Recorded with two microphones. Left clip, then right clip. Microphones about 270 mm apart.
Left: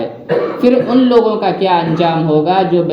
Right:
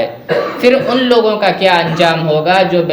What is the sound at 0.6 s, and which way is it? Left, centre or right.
A man's voice, right.